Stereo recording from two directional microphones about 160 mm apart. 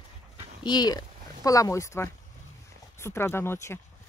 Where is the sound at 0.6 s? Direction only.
25° left (ahead or behind).